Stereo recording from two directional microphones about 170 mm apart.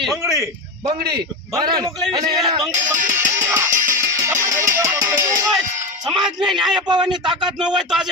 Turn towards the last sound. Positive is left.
turn(degrees=-25)  # may be behind; listen again after turning